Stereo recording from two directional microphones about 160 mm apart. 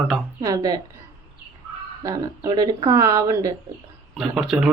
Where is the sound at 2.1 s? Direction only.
25° right (ahead or behind).